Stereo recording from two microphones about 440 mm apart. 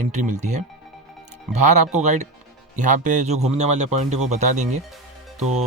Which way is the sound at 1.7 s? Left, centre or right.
Centre.